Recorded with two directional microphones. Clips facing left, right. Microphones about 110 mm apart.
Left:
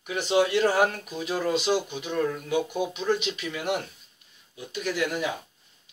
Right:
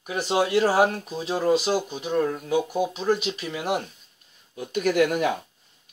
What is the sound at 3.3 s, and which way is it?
Speech, 30° right (ahead or behind).